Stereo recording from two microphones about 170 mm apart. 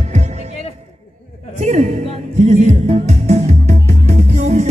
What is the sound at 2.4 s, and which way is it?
Music, 40° right (ahead or behind).